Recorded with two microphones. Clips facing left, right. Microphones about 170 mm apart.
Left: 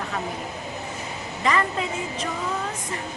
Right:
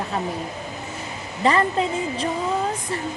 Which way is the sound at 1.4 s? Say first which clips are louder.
Right 4 dB; 30° right (ahead or behind).